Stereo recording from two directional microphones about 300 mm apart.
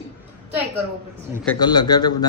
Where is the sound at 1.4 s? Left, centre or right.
Centre.